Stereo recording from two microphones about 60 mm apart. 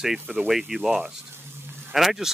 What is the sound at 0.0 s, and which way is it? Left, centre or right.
Speech, centre.